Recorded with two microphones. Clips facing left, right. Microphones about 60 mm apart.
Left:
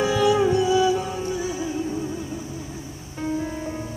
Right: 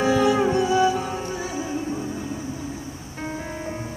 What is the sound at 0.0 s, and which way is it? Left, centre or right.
Music, right.